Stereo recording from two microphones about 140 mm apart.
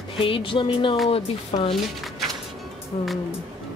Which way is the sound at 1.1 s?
45° left (ahead or behind).